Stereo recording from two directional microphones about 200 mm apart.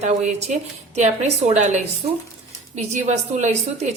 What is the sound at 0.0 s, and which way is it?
A woman's voice, 35° right (ahead or behind).